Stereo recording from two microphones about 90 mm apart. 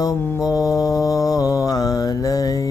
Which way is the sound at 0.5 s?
45° left (ahead or behind).